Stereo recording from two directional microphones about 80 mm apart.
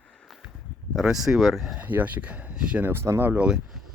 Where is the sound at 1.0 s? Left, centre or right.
Centre.